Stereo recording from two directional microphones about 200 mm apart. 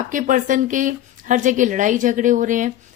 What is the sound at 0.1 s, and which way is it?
A woman's voice, 40° right (ahead or behind).